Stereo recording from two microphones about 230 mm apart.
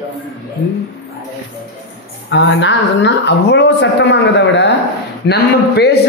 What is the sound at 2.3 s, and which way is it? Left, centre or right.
Speech, left.